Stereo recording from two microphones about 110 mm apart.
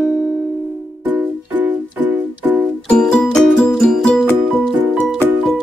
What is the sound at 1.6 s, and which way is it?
Music, 15° right (ahead or behind).